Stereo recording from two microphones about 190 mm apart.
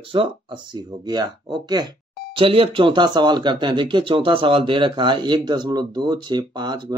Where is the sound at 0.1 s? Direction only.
25° right (ahead or behind).